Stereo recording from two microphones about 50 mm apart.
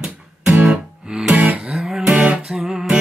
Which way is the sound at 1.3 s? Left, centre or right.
Right.